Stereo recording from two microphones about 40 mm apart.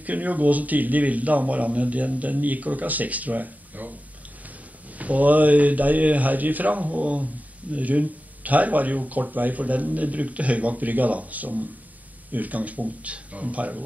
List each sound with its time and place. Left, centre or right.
0.0 s speech: right
4.9 s speech: right